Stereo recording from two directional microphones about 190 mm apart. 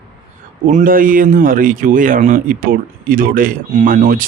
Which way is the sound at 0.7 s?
45° right (ahead or behind).